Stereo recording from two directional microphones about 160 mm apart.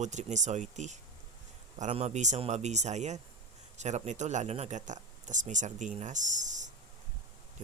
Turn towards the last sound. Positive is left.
turn(degrees=-50)  # may be behind; listen again after turning